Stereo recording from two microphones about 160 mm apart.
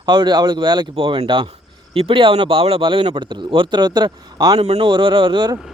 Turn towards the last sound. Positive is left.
turn(degrees=-30)  # may be behind; listen again after turning